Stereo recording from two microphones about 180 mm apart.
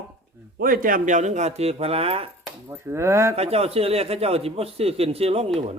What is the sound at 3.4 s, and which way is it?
A man's voice, 35° right (ahead or behind).